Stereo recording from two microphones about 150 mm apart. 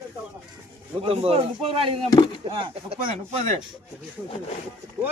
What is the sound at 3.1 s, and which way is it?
Speech, 45° right (ahead or behind).